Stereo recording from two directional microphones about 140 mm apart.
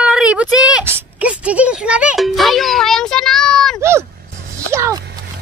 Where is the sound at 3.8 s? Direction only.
20° right (ahead or behind).